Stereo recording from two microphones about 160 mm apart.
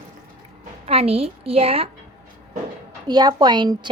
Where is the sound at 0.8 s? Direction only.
40° right (ahead or behind).